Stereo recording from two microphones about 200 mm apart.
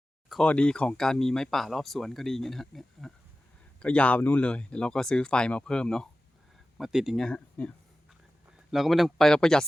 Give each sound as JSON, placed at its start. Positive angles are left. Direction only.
{"t": 0.3, "sound": "speech", "side_deg": 5}